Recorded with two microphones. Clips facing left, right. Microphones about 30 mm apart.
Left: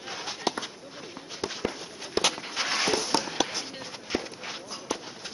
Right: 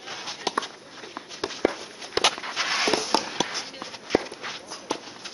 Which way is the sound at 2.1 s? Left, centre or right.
Right.